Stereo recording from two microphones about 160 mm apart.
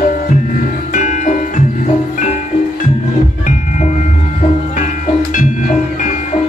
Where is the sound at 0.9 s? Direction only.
50° left (ahead or behind).